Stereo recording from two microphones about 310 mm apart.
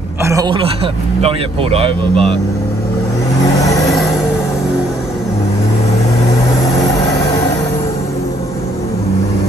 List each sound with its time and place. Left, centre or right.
0.2 s speech: centre
3.7 s music: centre